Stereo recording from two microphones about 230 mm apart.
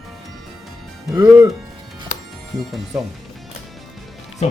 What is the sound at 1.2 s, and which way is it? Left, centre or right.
Speech, centre.